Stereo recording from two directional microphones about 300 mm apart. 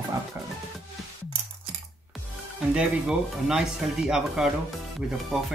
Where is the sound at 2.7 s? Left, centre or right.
Centre.